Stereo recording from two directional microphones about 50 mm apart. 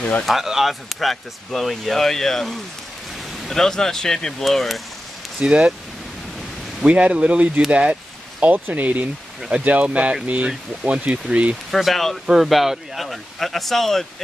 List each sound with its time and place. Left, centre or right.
0.2 s speech: centre
5.4 s speech: centre
6.9 s speech: right
7.7 s a sound: right
8.5 s speech: right
10.5 s speech: centre
11.7 s speech: centre